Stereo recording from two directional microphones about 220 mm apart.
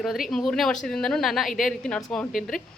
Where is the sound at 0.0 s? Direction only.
Centre (ahead or behind).